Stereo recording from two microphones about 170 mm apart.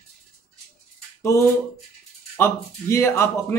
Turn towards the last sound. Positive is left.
turn(degrees=15)  # may be behind; listen again after turning